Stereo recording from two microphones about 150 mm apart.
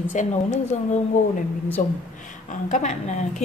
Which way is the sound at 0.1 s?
55° left (ahead or behind).